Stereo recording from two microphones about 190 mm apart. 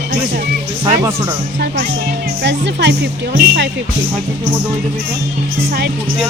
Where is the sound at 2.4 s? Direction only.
65° right (ahead or behind).